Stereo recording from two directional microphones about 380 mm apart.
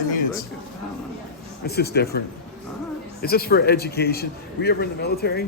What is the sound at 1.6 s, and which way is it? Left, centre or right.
A man's voice, left.